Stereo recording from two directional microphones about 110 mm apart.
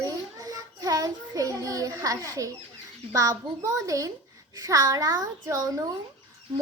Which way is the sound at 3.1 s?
30° right (ahead or behind).